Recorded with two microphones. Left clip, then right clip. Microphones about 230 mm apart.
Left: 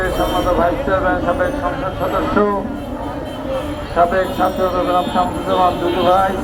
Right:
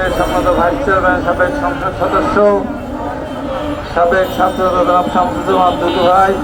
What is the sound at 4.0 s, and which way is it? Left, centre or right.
A man's voice, right.